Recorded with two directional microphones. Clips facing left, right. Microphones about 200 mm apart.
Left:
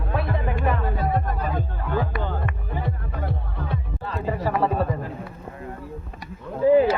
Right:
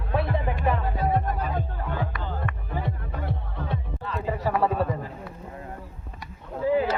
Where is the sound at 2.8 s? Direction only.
25° right (ahead or behind).